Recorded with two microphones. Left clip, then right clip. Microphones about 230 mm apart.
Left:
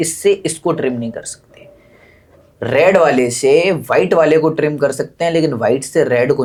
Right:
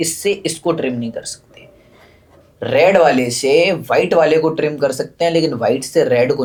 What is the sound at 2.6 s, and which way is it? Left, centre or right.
Speech, left.